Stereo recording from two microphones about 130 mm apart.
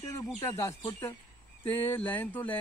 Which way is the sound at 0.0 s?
25° left (ahead or behind).